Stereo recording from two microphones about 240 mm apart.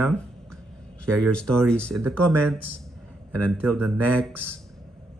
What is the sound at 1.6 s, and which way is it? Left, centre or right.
Speech, centre.